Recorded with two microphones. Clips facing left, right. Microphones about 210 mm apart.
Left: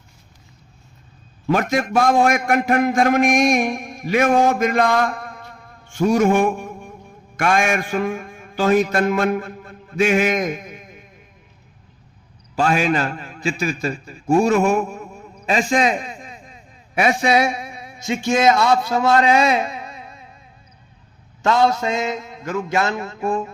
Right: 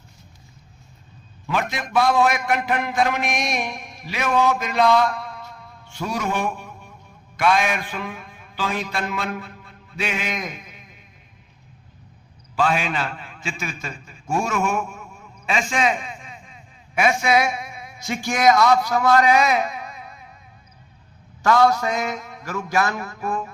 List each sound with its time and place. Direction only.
1.5 s a man's voice: 45° left (ahead or behind)
12.5 s a man's voice: 45° left (ahead or behind)
18.0 s a man's voice: 20° left (ahead or behind)
21.4 s a man's voice: 25° left (ahead or behind)